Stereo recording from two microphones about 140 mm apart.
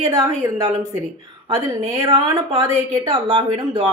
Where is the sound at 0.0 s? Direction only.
35° right (ahead or behind).